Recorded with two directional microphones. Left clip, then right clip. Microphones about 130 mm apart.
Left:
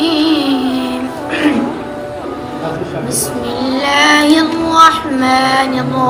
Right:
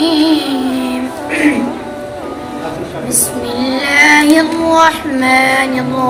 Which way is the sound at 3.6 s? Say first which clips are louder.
Right 2 dB; 25° right (ahead or behind).